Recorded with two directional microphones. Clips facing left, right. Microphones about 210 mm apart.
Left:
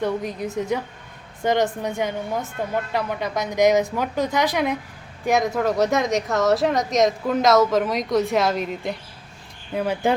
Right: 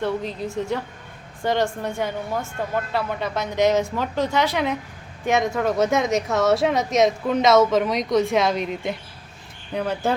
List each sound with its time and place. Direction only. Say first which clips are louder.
0.0 s speech: left 1 dB; 15° left (ahead or behind)
5.3 s speech: left 1 dB; centre (ahead or behind)